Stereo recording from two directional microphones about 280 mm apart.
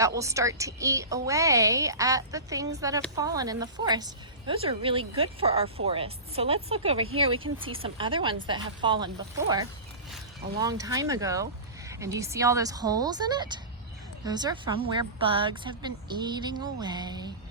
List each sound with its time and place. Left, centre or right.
0.2 s a woman's voice: centre